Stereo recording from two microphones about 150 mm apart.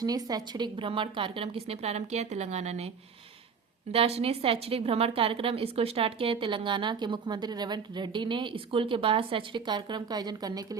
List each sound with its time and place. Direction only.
0.0 s a woman's voice: 25° right (ahead or behind); by 2.9 s 45° right (ahead or behind)
3.9 s a woman's voice: 45° right (ahead or behind); by 10.8 s 25° right (ahead or behind)